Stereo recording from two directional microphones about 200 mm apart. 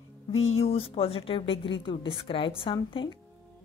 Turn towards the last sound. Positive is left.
turn(degrees=25)  # may be behind; listen again after turning